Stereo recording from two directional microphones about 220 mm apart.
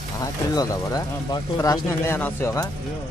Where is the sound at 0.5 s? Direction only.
15° left (ahead or behind).